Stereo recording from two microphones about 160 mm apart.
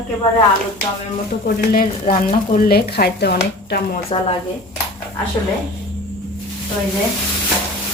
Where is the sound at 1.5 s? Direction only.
65° left (ahead or behind).